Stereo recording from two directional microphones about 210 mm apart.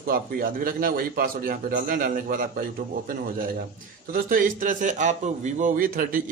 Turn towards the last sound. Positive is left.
turn(degrees=-40)  # may be behind; listen again after turning